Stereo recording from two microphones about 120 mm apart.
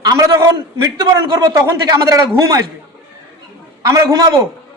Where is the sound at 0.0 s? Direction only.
30° right (ahead or behind).